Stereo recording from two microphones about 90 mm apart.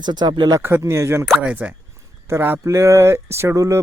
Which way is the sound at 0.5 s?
25° right (ahead or behind).